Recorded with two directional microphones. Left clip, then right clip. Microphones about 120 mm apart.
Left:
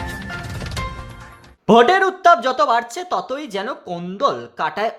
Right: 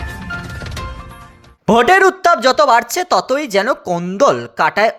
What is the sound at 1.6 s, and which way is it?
Speech, 40° right (ahead or behind).